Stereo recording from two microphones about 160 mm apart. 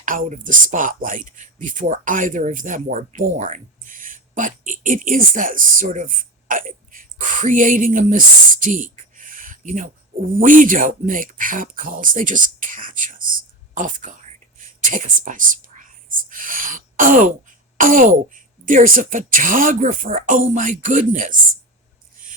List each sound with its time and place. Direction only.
0.0 s speech: 55° right (ahead or behind)